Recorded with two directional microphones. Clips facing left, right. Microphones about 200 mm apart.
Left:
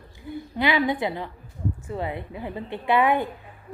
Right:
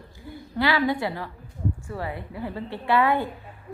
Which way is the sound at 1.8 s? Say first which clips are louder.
Left 2 dB; 20° left (ahead or behind).